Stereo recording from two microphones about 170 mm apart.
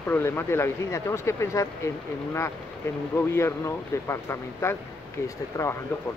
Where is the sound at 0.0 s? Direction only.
10° left (ahead or behind).